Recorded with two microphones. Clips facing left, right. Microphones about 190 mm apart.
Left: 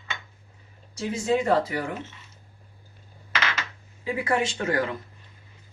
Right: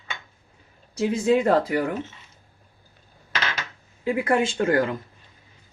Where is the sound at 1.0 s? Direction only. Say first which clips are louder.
Right 4 dB; 60° right (ahead or behind).